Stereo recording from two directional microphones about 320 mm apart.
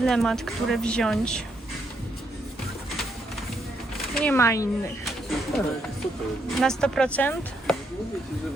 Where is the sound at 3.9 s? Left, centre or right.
Centre.